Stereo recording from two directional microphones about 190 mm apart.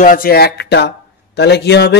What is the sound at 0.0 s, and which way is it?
A man's voice, 50° left (ahead or behind).